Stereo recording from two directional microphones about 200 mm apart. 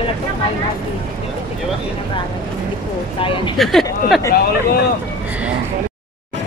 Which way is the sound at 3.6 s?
Centre (ahead or behind).